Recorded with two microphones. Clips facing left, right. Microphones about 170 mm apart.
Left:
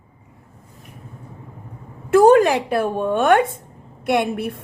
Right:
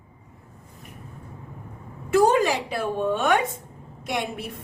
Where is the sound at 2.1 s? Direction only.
55° left (ahead or behind).